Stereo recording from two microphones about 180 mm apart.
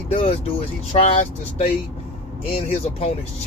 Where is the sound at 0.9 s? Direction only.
35° left (ahead or behind).